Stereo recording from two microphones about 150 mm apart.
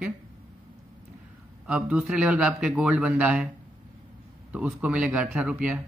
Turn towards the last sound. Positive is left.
turn(degrees=-5)  # may be behind; listen again after turning